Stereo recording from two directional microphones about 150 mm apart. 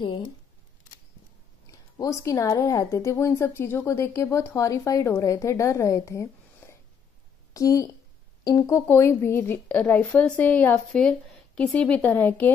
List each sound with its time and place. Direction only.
1.7 s speech: 20° left (ahead or behind)